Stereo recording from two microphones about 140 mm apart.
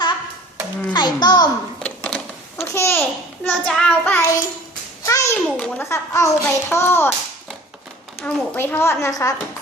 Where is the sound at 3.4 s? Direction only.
5° left (ahead or behind).